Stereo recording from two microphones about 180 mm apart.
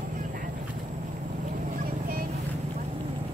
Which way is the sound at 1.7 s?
50° right (ahead or behind).